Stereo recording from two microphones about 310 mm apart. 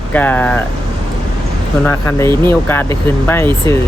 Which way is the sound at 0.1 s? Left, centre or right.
Centre.